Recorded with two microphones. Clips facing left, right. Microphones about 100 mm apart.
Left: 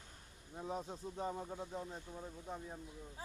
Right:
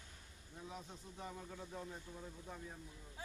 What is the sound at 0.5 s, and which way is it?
Speech, 40° left (ahead or behind).